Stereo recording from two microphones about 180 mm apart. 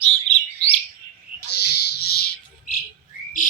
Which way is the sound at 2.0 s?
60° left (ahead or behind).